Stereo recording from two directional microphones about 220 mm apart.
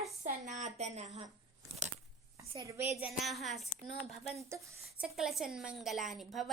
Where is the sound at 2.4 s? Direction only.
15° right (ahead or behind).